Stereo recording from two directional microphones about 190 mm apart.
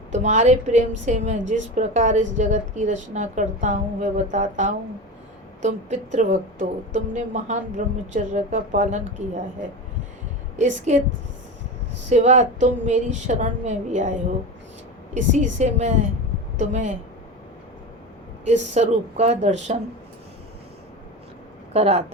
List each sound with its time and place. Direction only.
0.1 s a woman's voice: 40° right (ahead or behind)
10.8 s a woman's voice: 40° right (ahead or behind)
12.0 s a woman's voice: 35° right (ahead or behind)
15.1 s a woman's voice: 40° right (ahead or behind)
18.4 s a woman's voice: 35° right (ahead or behind)
21.7 s speech: 35° right (ahead or behind)